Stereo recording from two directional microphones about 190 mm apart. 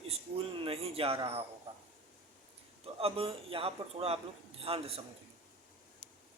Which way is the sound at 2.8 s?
30° right (ahead or behind).